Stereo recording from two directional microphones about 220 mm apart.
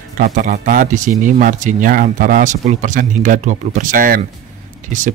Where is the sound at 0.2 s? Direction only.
40° right (ahead or behind).